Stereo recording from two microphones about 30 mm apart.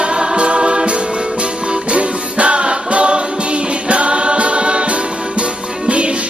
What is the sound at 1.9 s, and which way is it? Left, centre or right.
Music, right.